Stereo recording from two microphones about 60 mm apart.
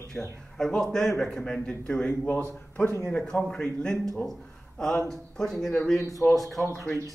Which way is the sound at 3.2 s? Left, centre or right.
Centre.